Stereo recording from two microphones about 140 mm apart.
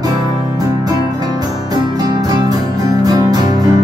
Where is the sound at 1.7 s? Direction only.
30° right (ahead or behind).